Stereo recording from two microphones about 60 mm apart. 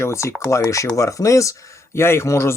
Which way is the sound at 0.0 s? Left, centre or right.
Left.